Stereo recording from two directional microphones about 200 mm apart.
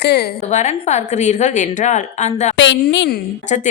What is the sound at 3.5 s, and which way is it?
Speech, 35° left (ahead or behind).